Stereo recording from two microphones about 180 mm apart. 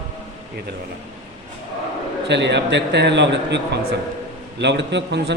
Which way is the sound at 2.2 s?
75° right (ahead or behind).